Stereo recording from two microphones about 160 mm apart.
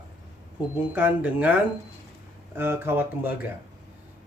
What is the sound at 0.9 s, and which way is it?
Speech, 10° right (ahead or behind).